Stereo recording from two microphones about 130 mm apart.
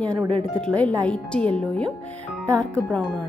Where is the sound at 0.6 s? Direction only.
5° left (ahead or behind).